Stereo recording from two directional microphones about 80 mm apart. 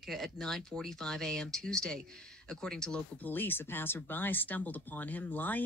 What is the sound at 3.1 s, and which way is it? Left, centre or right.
Speech, left.